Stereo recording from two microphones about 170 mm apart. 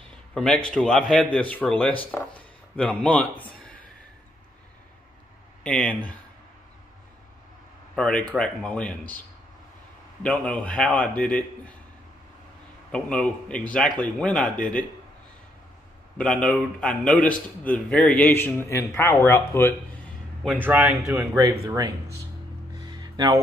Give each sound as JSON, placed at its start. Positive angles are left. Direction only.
{"t": 0.0, "sound": "a sound", "side_deg": 5}
{"t": 0.7, "sound": "speech", "side_deg": 5}
{"t": 5.6, "sound": "a man's voice", "side_deg": 5}
{"t": 7.9, "sound": "a man's voice", "side_deg": 5}
{"t": 10.2, "sound": "a man's voice", "side_deg": 5}
{"t": 12.9, "sound": "a man's voice", "side_deg": 5}
{"t": 16.2, "sound": "a man's voice", "side_deg": 5}
{"t": 20.6, "sound": "speech", "side_deg": -5}
{"t": 22.8, "sound": "music", "side_deg": -25}